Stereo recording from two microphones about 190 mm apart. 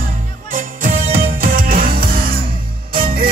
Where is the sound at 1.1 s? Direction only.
50° right (ahead or behind).